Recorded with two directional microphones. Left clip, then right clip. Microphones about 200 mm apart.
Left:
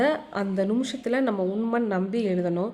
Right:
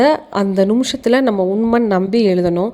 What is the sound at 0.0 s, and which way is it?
A woman's voice, 40° right (ahead or behind).